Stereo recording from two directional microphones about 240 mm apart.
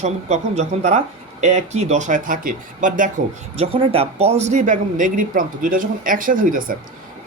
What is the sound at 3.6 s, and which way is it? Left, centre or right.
Speech, right.